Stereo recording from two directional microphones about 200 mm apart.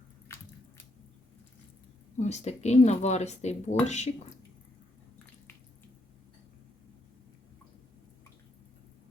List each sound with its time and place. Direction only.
0.3 s squish: 15° left (ahead or behind)
2.1 s speech: 35° left (ahead or behind)